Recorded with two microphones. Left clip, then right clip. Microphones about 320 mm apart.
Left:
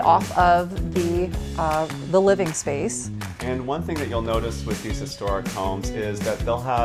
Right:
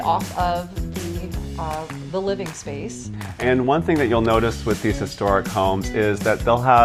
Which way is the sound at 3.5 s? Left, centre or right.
Right.